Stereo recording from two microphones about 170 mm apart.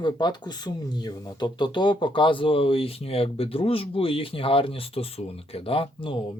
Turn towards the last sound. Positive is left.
turn(degrees=30)  # may be behind; listen again after turning